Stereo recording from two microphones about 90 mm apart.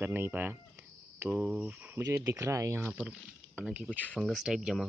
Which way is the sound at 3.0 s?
15° right (ahead or behind).